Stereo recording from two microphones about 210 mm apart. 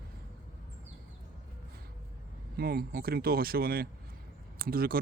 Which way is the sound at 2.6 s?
45° right (ahead or behind).